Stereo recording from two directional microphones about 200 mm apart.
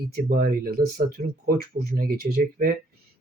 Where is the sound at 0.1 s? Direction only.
45° right (ahead or behind).